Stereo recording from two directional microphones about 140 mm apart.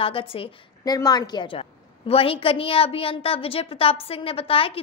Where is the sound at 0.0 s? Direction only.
40° left (ahead or behind).